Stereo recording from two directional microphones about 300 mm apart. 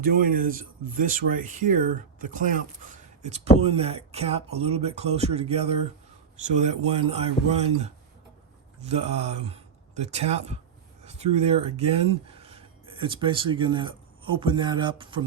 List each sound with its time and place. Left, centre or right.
0.0 s speech: right